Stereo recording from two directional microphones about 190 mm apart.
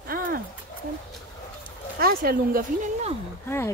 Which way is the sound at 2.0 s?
50° right (ahead or behind).